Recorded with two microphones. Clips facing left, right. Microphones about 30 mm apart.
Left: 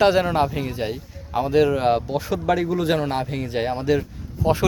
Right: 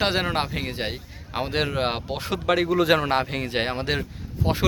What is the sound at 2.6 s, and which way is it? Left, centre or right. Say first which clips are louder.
Speech: right 2 dB; right.